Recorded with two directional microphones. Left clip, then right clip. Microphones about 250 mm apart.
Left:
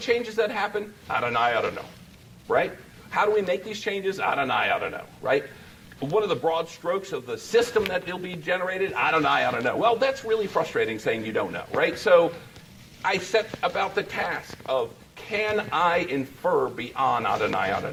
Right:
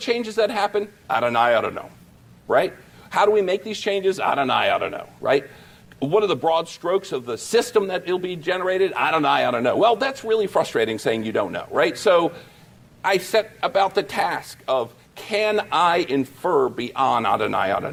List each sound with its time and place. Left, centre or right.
0.0 s a man's voice: right
3.1 s a man's voice: right